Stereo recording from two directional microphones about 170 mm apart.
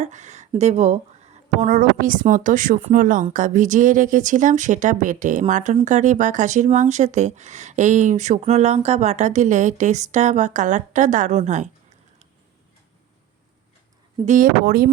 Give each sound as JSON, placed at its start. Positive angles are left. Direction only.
{"t": 0.0, "sound": "speech", "side_deg": -45}
{"t": 14.3, "sound": "speech", "side_deg": -55}